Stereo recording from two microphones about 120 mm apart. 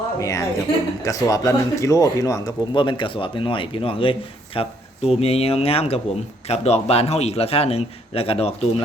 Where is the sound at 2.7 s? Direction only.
40° left (ahead or behind).